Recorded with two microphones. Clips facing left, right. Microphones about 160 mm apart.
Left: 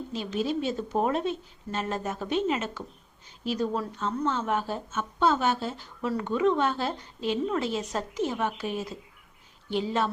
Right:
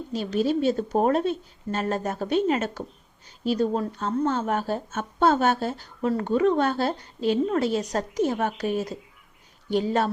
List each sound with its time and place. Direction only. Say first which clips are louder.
0.1 s speech: right 6 dB; 40° right (ahead or behind)
3.4 s speech: right 5 dB; 35° right (ahead or behind)
3.8 s speech: right 4 dB; 45° right (ahead or behind)